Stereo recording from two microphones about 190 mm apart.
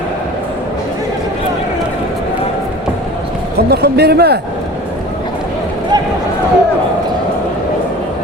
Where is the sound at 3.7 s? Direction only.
55° right (ahead or behind).